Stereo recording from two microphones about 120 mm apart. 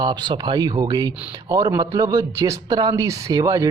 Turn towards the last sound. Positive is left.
turn(degrees=-30)  # may be behind; listen again after turning